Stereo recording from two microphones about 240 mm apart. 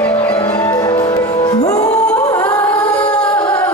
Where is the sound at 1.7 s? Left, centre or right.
Centre.